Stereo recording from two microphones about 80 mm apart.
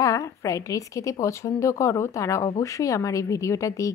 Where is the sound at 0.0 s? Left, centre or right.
Left.